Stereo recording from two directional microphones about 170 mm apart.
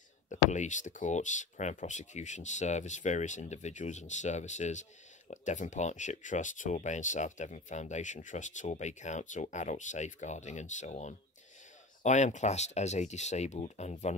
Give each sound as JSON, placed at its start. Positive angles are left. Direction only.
{"t": 0.3, "sound": "speech", "side_deg": 45}